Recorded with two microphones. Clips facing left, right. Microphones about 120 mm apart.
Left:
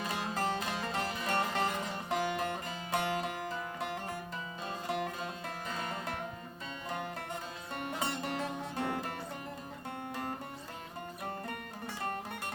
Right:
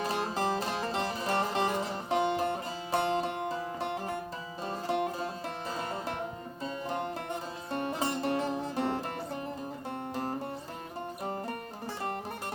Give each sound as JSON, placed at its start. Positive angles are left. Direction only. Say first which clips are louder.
{"t": 0.0, "sound": "music", "louder": "right 4 dB", "side_deg": -35}
{"t": 7.7, "sound": "music", "louder": "right 5 dB", "side_deg": -30}